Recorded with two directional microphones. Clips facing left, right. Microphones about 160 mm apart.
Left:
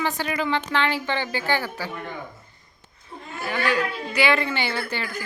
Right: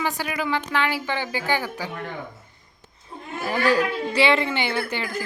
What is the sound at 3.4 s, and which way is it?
A woman's voice, 35° right (ahead or behind).